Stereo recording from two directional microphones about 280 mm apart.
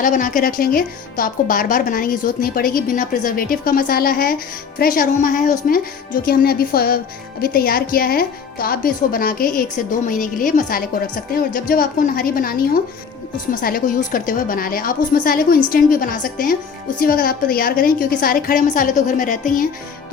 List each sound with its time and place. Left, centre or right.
0.0 s a woman's voice: left